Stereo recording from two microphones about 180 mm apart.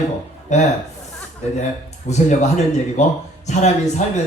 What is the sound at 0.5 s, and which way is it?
Speech, 40° left (ahead or behind).